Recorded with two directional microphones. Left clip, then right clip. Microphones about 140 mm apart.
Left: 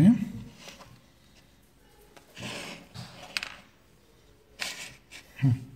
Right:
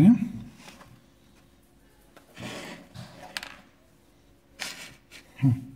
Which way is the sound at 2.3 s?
20° right (ahead or behind).